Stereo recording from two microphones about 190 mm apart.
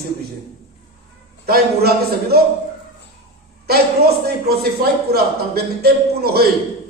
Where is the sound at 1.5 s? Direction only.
55° right (ahead or behind).